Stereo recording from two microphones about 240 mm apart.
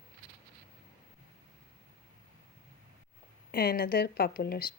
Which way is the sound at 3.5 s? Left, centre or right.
Left.